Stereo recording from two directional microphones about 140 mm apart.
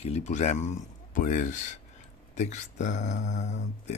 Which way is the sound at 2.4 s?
55° left (ahead or behind).